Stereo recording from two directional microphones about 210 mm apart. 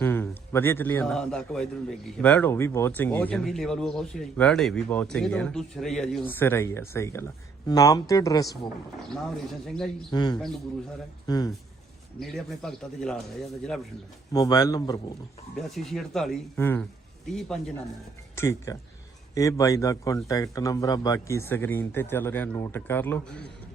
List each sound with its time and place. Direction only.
0.0 s a man's voice: 10° left (ahead or behind)
9.1 s speech: centre (ahead or behind)
10.1 s a man's voice: 20° left (ahead or behind)
12.2 s speech: centre (ahead or behind)
14.3 s a man's voice: 20° left (ahead or behind)
15.5 s speech: centre (ahead or behind)
18.3 s a man's voice: 15° left (ahead or behind)